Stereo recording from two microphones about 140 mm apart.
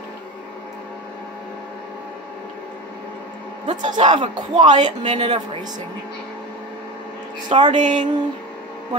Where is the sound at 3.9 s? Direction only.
35° right (ahead or behind).